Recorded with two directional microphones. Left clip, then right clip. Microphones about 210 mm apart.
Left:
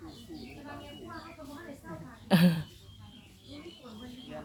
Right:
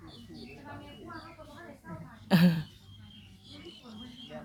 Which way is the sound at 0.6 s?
50° left (ahead or behind).